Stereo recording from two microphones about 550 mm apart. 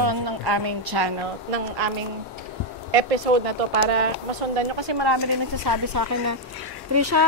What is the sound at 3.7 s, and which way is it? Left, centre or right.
Speech, right.